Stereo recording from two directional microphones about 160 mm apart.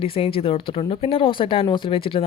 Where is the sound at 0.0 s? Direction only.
35° left (ahead or behind).